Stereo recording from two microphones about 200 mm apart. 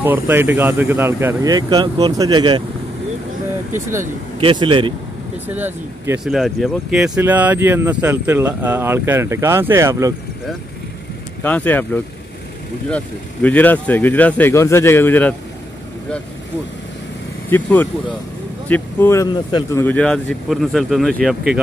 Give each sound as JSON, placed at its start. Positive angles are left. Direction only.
{"t": 0.0, "sound": "speech", "side_deg": -10}
{"t": 4.4, "sound": "a man's voice", "side_deg": -25}
{"t": 5.5, "sound": "speech", "side_deg": -10}
{"t": 11.4, "sound": "speech", "side_deg": 10}
{"t": 17.5, "sound": "speech", "side_deg": 10}